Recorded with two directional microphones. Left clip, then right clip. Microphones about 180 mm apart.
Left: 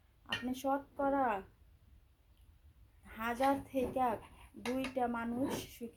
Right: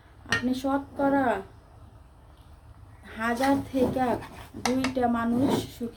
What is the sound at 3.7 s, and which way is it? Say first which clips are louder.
Speech: right 9 dB; 25° left (ahead or behind).